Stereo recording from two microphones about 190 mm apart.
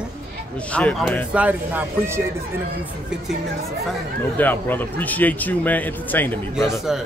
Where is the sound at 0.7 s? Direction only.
5° left (ahead or behind).